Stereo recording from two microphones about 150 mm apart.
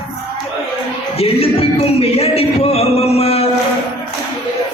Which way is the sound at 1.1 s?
40° left (ahead or behind).